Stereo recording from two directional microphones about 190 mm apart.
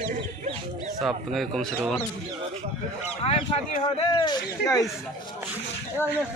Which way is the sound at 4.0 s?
25° left (ahead or behind).